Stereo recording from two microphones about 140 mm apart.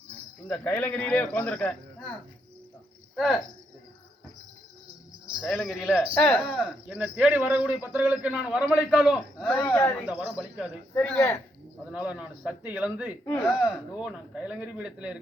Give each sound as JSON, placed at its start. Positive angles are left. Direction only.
{"t": 0.4, "sound": "speech", "side_deg": 10}
{"t": 5.4, "sound": "speech", "side_deg": 5}
{"t": 6.6, "sound": "a man's voice", "side_deg": -10}
{"t": 9.5, "sound": "speech", "side_deg": 15}
{"t": 10.1, "sound": "a man's voice", "side_deg": -10}
{"t": 10.9, "sound": "speech", "side_deg": 10}
{"t": 11.9, "sound": "a man's voice", "side_deg": -10}